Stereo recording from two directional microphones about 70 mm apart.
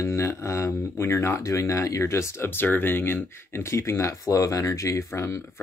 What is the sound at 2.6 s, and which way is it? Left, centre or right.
Speech, left.